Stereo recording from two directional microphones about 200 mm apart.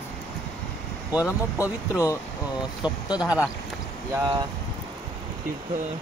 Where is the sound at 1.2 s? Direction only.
15° left (ahead or behind).